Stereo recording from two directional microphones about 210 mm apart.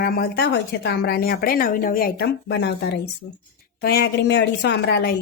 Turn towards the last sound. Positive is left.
turn(degrees=50)  # may be behind; listen again after turning